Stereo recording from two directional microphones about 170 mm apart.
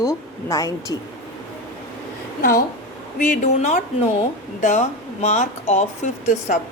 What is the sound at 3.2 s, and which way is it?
Speech, 45° left (ahead or behind).